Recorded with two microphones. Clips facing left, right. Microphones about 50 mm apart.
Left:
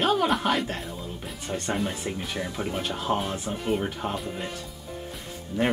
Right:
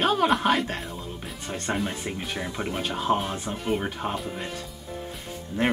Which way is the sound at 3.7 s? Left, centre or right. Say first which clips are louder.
Even; centre.